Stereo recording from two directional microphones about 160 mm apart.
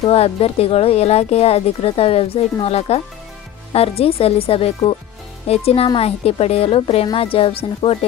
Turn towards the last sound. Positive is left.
turn(degrees=35)  # may be behind; listen again after turning